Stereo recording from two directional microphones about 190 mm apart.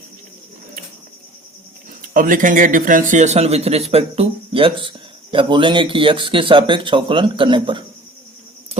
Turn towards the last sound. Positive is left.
turn(degrees=-25)  # may be behind; listen again after turning